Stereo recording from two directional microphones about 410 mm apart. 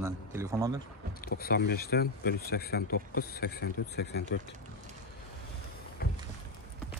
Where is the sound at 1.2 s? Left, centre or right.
Left.